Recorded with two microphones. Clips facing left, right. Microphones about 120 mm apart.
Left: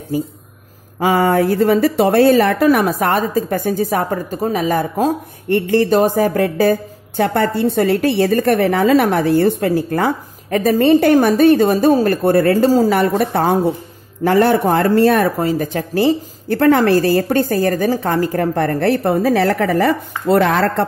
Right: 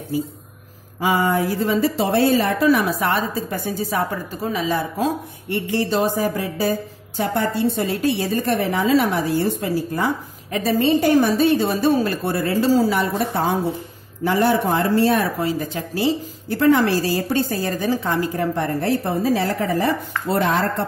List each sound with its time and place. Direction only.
0.9 s speech: 50° left (ahead or behind); by 20.8 s 75° left (ahead or behind)